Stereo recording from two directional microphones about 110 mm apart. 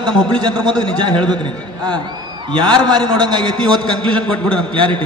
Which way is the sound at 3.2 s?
45° right (ahead or behind).